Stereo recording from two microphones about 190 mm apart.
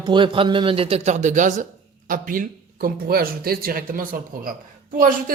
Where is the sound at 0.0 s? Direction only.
25° right (ahead or behind).